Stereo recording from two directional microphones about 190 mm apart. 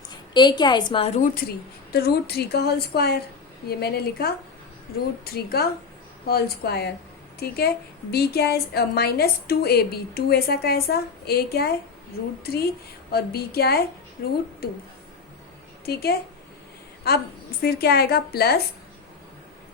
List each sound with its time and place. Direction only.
0.3 s a woman's voice: 25° left (ahead or behind)
1.9 s a woman's voice: 55° left (ahead or behind)
13.1 s a woman's voice: 55° left (ahead or behind)
15.9 s a woman's voice: 55° left (ahead or behind)